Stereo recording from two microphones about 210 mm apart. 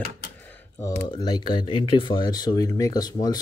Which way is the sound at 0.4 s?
10° left (ahead or behind).